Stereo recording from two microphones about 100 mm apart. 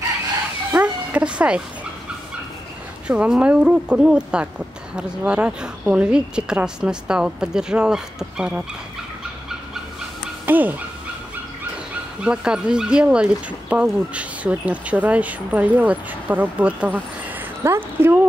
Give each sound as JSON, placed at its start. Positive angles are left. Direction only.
{"t": 0.7, "sound": "music", "side_deg": -15}
{"t": 3.1, "sound": "speech", "side_deg": -10}
{"t": 10.4, "sound": "speech", "side_deg": -20}
{"t": 12.2, "sound": "speech", "side_deg": -10}